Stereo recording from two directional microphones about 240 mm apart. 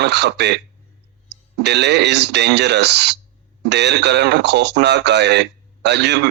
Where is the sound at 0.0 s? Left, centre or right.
Right.